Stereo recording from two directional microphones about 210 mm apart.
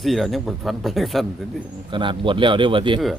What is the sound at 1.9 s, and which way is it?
A man's voice, 25° right (ahead or behind).